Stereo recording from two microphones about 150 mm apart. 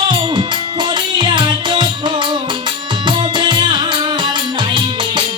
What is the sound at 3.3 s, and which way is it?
Music, 30° right (ahead or behind).